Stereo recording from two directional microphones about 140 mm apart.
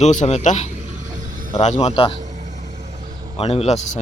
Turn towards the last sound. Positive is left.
turn(degrees=50)  # may be behind; listen again after turning